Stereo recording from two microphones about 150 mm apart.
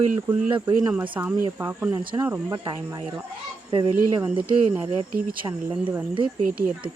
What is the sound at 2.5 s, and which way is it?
Speech, 30° right (ahead or behind).